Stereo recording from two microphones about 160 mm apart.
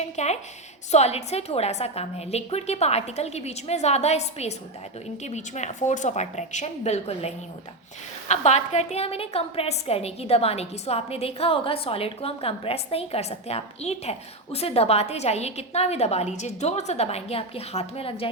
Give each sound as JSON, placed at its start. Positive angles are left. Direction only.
{"t": 0.0, "sound": "a woman's voice", "side_deg": 45}